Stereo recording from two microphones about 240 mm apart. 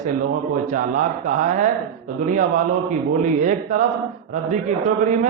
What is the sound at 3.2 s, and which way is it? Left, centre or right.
Speech, right.